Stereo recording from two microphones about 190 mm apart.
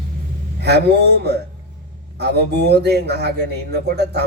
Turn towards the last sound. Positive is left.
turn(degrees=-60)  # may be behind; listen again after turning